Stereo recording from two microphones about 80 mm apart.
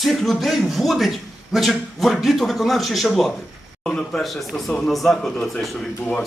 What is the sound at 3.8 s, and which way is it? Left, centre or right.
Speech, centre.